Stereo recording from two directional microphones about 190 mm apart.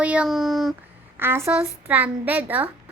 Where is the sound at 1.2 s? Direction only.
15° right (ahead or behind).